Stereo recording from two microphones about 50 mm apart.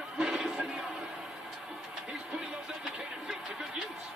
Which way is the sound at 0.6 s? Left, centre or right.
Centre.